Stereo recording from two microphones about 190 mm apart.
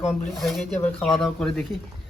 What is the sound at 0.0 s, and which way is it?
Speech, centre (ahead or behind).